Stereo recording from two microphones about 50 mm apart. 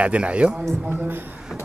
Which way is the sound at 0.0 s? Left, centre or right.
Right.